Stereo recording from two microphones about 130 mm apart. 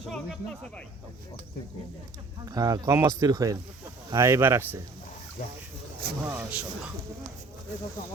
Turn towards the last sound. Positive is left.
turn(degrees=-10)  # may be behind; listen again after turning